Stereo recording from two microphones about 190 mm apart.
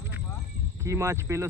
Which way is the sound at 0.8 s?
15° right (ahead or behind).